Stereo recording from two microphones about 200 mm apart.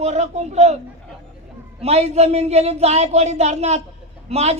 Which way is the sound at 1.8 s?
30° right (ahead or behind).